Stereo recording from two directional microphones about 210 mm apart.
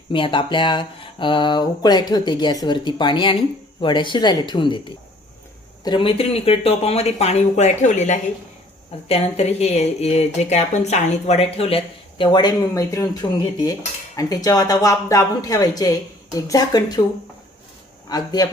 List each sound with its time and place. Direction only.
0.1 s speech: 25° left (ahead or behind)
5.8 s speech: 25° left (ahead or behind)
14.2 s speech: 15° left (ahead or behind)
18.1 s speech: 20° left (ahead or behind)